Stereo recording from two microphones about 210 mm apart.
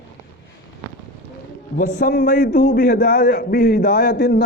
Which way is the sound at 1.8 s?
40° left (ahead or behind).